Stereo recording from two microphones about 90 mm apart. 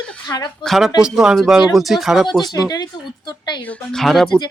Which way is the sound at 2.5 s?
45° left (ahead or behind).